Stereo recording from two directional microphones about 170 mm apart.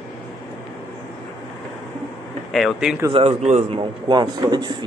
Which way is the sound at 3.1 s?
35° right (ahead or behind).